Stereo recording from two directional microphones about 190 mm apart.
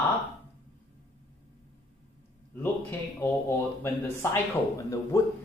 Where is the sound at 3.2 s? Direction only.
10° left (ahead or behind).